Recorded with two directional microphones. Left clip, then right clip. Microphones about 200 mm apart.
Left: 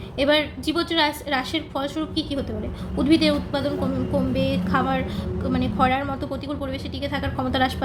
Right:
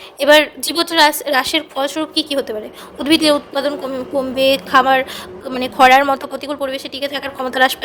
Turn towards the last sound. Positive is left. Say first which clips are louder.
# right 8 dB
turn(degrees=-40)  # may be behind; listen again after turning